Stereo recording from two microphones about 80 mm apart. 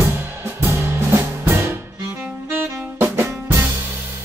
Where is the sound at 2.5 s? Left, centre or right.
Right.